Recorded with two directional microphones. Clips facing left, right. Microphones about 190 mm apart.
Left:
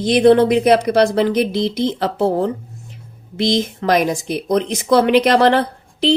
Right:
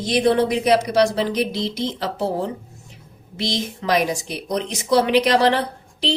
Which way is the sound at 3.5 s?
50° left (ahead or behind).